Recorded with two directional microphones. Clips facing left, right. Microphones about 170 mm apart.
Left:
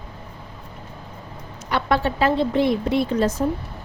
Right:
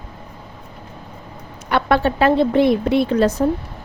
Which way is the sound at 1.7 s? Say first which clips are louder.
Right 4 dB; 60° right (ahead or behind).